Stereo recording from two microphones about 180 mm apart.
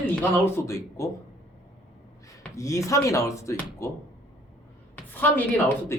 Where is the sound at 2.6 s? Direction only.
15° left (ahead or behind).